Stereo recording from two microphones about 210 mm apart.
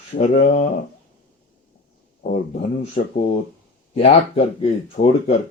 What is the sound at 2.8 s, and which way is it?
Speech, 40° left (ahead or behind).